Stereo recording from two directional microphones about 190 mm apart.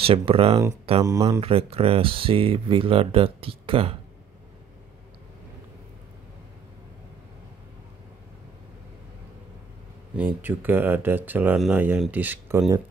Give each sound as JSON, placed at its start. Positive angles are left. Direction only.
{"t": 0.0, "sound": "speech", "side_deg": -30}
{"t": 1.0, "sound": "speech", "side_deg": -15}
{"t": 1.4, "sound": "speech", "side_deg": -30}
{"t": 10.1, "sound": "speech", "side_deg": -10}